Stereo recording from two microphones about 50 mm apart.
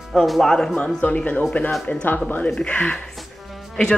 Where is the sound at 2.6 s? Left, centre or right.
Left.